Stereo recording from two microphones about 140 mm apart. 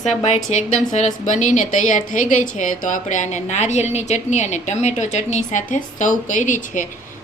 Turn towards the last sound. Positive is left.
turn(degrees=65)  # may be behind; listen again after turning